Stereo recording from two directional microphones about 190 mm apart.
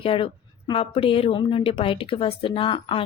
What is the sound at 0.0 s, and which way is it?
A woman's voice, 30° left (ahead or behind).